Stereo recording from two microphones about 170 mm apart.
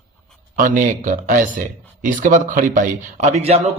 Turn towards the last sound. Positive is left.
turn(degrees=-40)  # may be behind; listen again after turning